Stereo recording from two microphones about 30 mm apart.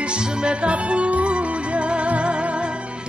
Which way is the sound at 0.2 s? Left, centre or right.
Right.